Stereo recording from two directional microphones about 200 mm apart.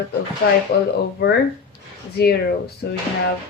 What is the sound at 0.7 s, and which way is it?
Speech, 55° left (ahead or behind).